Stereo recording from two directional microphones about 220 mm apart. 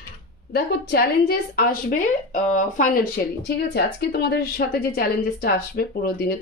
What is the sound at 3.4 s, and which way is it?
A woman's voice, 50° left (ahead or behind).